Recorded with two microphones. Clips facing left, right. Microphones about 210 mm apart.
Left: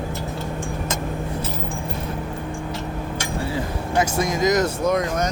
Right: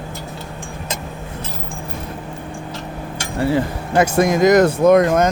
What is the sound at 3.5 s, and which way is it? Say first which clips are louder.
Speech: right 5 dB; 60° right (ahead or behind).